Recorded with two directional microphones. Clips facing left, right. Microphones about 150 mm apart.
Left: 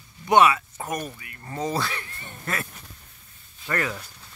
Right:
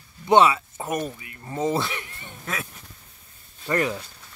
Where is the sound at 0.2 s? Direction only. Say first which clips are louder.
Right 1 dB; 25° right (ahead or behind).